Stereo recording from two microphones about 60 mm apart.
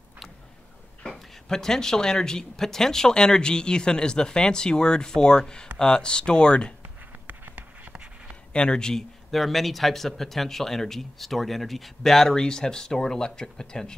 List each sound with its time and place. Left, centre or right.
1.0 s speech: centre
6.8 s a sound: right
8.5 s speech: centre